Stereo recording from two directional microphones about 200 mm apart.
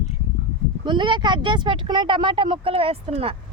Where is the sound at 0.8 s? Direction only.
25° right (ahead or behind).